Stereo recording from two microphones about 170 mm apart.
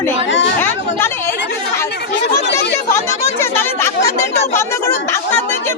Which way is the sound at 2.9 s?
15° left (ahead or behind).